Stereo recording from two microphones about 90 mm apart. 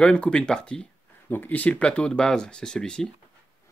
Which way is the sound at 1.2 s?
20° left (ahead or behind).